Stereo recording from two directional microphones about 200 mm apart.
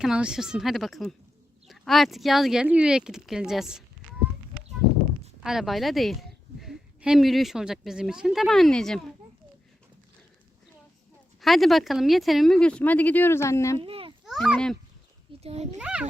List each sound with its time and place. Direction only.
0.0 s speech: 5° right (ahead or behind)
5.4 s a woman's voice: centre (ahead or behind)
11.3 s speech: centre (ahead or behind)
13.7 s babbling: 25° right (ahead or behind)
14.3 s a child's voice: centre (ahead or behind)
15.4 s a child's voice: 30° right (ahead or behind)
15.8 s speech: 5° right (ahead or behind)